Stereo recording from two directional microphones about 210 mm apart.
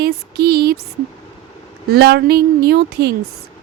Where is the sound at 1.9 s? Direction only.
50° right (ahead or behind).